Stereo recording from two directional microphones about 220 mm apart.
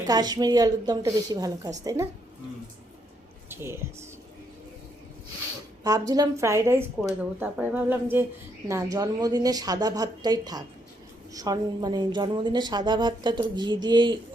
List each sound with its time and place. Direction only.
0.1 s a woman's voice: 15° right (ahead or behind)
3.5 s speech: 10° right (ahead or behind)
5.8 s a woman's voice: 15° right (ahead or behind)